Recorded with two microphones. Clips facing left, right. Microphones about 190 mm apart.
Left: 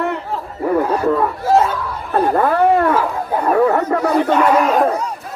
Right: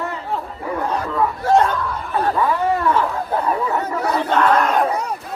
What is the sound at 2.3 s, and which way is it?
Speech, 60° left (ahead or behind).